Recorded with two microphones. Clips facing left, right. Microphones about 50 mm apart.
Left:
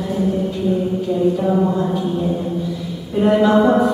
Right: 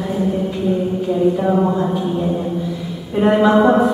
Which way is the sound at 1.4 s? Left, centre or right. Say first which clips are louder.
Right 1 dB; right.